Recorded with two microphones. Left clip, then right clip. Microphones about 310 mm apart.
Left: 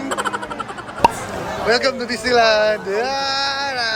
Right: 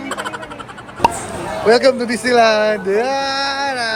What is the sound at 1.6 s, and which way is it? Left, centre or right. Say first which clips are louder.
Speech: right 6 dB; centre.